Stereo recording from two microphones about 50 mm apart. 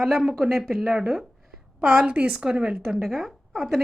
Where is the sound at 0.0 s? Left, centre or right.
Centre.